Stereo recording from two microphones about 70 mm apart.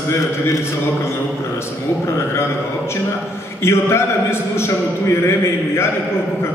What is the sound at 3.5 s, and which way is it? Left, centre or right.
A man's voice, left.